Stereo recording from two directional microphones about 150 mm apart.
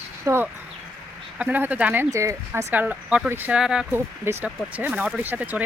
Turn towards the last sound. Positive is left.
turn(degrees=-10)  # may be behind; listen again after turning